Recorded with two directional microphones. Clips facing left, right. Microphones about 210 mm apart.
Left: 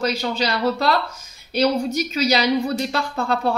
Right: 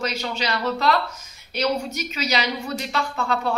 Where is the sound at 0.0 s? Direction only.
35° left (ahead or behind).